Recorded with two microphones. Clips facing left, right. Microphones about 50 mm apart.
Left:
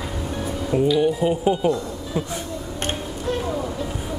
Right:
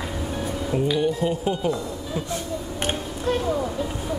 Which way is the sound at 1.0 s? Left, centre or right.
Centre.